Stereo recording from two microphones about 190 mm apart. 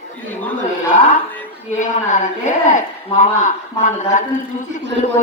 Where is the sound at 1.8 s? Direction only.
40° left (ahead or behind).